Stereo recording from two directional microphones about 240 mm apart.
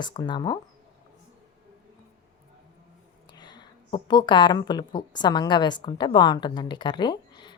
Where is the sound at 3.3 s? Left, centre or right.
Centre.